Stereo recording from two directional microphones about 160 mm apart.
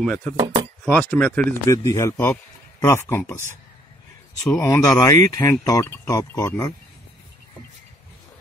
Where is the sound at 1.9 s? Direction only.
20° left (ahead or behind).